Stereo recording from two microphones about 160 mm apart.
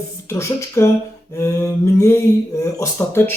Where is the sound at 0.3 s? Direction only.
15° left (ahead or behind).